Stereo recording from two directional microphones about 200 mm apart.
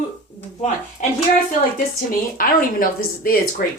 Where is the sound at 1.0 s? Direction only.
40° left (ahead or behind).